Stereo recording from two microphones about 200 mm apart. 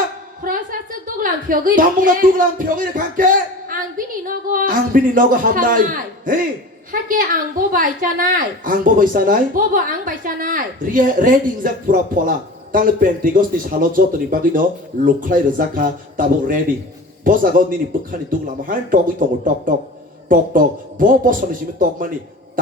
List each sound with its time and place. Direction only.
0.4 s a woman's voice: 45° right (ahead or behind)
20.2 s speech: 45° right (ahead or behind)